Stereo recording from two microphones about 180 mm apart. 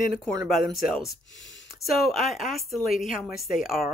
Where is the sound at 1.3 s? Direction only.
90° left.